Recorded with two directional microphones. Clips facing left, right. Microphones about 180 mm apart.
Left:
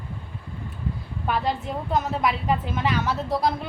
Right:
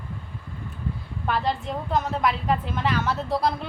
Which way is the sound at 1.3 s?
Centre (ahead or behind).